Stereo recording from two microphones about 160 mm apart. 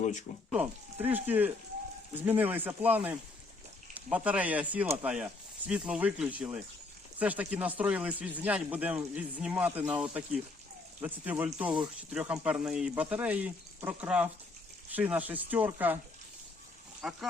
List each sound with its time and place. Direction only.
0.0 s speech: 50° left (ahead or behind)
0.5 s speech: 10° right (ahead or behind)
17.0 s speech: 5° right (ahead or behind)